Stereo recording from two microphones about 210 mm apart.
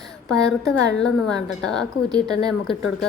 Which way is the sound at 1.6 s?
5° left (ahead or behind).